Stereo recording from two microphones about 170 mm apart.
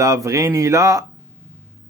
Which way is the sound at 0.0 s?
20° right (ahead or behind).